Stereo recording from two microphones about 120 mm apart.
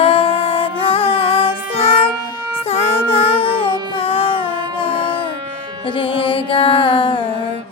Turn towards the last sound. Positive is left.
turn(degrees=45)  # may be behind; listen again after turning